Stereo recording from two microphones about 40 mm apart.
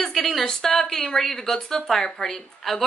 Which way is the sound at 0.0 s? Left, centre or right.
Centre.